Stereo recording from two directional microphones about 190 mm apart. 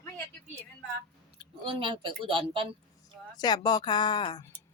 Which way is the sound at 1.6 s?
25° right (ahead or behind).